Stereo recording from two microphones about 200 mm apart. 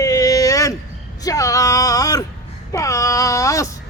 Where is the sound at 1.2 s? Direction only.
15° left (ahead or behind).